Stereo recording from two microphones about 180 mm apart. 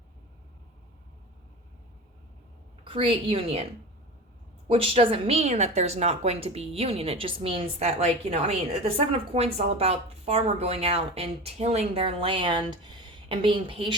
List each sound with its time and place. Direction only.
2.8 s a woman's voice: 30° right (ahead or behind)
4.7 s a woman's voice: 30° right (ahead or behind)